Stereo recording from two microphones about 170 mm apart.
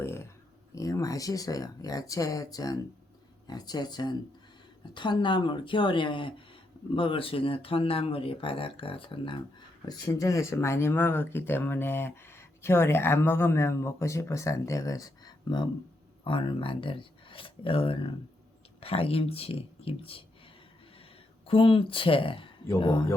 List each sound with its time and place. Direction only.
0.0 s a sound: 15° left (ahead or behind)
0.8 s speech: 20° left (ahead or behind)
21.4 s speech: 30° left (ahead or behind)